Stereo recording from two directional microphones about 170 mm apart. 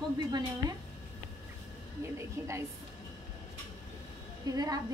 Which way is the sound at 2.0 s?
15° right (ahead or behind).